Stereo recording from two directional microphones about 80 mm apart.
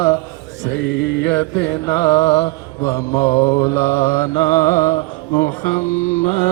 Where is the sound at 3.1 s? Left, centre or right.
Left.